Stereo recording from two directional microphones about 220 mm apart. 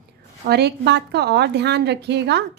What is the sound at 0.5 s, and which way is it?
A woman's voice, 50° right (ahead or behind).